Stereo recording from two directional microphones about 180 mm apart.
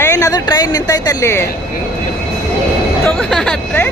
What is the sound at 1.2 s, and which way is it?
Speech, 15° left (ahead or behind).